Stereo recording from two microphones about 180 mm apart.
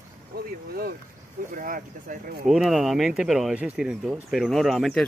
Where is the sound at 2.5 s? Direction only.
Centre (ahead or behind).